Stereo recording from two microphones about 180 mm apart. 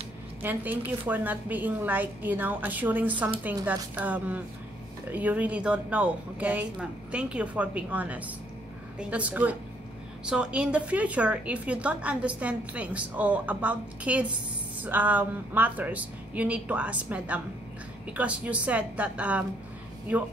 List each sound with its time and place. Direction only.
0.4 s a woman's voice: 10° right (ahead or behind)